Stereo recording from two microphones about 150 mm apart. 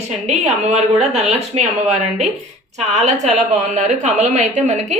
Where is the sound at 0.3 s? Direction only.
45° right (ahead or behind).